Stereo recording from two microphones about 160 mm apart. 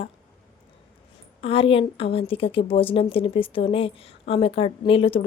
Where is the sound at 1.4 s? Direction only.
35° left (ahead or behind).